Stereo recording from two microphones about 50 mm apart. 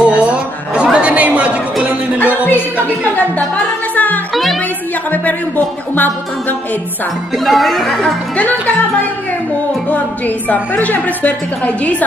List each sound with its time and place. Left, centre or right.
0.0 s a sound: right
0.9 s chatter: right
2.1 s music: left
3.9 s music: left
7.4 s speech: centre
9.8 s a woman's voice: left